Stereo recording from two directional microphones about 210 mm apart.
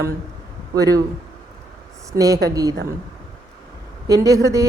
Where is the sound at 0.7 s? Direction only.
15° right (ahead or behind).